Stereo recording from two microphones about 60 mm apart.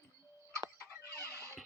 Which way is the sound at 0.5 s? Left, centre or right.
Right.